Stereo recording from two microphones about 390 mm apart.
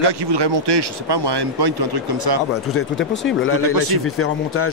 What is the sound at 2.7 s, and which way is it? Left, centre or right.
Speech, left.